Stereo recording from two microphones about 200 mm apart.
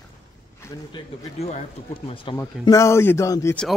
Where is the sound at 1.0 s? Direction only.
25° left (ahead or behind).